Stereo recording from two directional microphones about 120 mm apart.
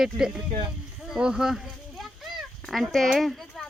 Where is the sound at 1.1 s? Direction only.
5° right (ahead or behind).